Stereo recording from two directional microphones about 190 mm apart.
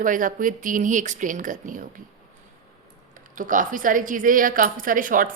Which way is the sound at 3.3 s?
45° right (ahead or behind).